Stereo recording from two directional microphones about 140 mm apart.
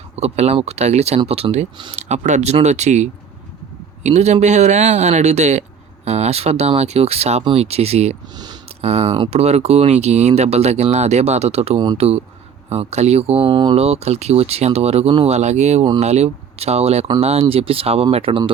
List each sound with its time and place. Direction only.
0.2 s speech: 50° right (ahead or behind); by 13.7 s 35° right (ahead or behind)
13.7 s speech: 50° right (ahead or behind)